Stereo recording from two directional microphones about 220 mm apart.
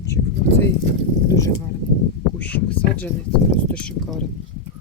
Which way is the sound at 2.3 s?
5° left (ahead or behind).